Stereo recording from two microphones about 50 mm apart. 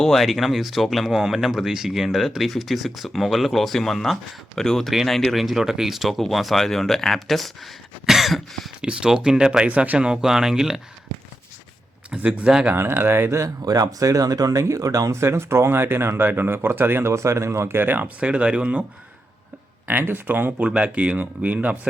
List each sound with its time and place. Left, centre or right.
0.0 s speech: centre
5.4 s speech: centre
8.8 s speech: centre
9.6 s speech: right
10.0 s speech: centre
12.1 s speech: right
12.7 s speech: right
14.1 s speech: right
17.1 s speech: right
18.2 s speech: right
19.9 s speech: right
20.7 s speech: right